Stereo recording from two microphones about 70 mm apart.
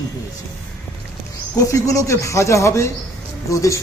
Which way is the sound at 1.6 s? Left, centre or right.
Left.